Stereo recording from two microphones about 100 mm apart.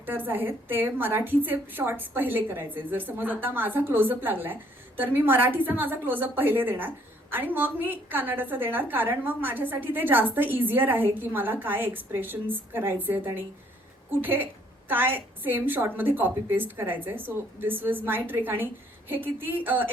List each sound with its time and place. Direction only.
0.0 s a woman's voice: 20° right (ahead or behind)